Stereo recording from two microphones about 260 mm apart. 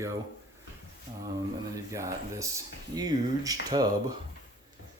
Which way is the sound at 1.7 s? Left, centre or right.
Centre.